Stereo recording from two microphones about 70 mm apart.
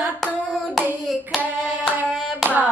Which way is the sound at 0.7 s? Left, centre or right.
Centre.